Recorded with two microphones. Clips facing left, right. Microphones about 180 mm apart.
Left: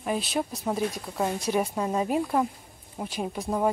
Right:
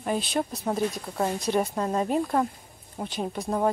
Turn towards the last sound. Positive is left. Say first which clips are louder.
# even
turn(degrees=5)  # may be behind; listen again after turning